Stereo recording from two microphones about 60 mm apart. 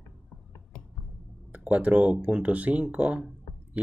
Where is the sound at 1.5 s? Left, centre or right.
Right.